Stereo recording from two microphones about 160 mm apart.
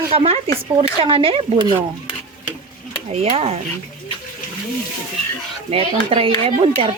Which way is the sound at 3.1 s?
40° right (ahead or behind).